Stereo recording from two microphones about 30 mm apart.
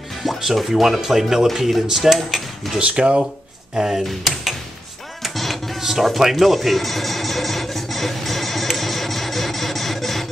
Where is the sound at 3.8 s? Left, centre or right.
Centre.